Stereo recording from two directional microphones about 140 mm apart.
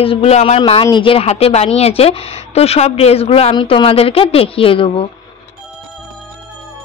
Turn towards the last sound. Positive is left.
turn(degrees=40)  # may be behind; listen again after turning